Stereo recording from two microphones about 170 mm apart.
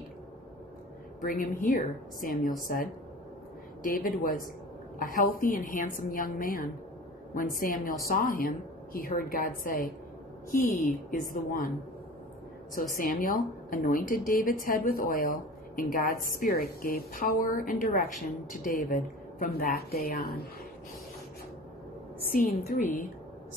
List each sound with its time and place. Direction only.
1.2 s a woman's voice: 55° left (ahead or behind)
3.8 s a woman's voice: 55° left (ahead or behind)
12.9 s a woman's voice: 55° left (ahead or behind)
22.6 s a woman's voice: 45° left (ahead or behind)